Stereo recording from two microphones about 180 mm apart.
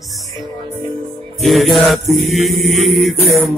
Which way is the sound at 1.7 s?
Centre (ahead or behind).